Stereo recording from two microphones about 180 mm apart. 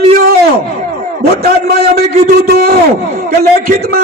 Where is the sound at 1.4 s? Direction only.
60° right (ahead or behind).